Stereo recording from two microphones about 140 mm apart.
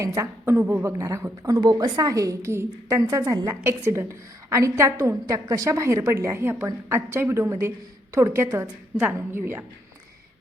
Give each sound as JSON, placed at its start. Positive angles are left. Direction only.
{"t": 0.2, "sound": "a woman's voice", "side_deg": -20}